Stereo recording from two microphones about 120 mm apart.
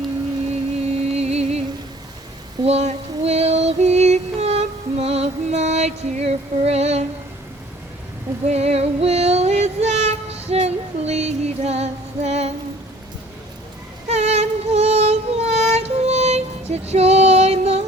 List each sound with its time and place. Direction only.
0.9 s music: 60° right (ahead or behind)
2.6 s music: 65° right (ahead or behind)
8.4 s female singing: 65° right (ahead or behind)
14.1 s music: 65° right (ahead or behind)